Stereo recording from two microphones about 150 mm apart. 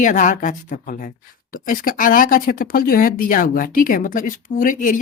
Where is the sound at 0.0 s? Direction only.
60° left (ahead or behind).